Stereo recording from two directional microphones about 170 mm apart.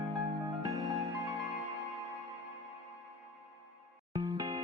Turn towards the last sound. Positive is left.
turn(degrees=-25)  # may be behind; listen again after turning